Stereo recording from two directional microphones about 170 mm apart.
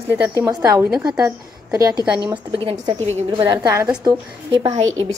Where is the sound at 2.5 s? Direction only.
30° right (ahead or behind).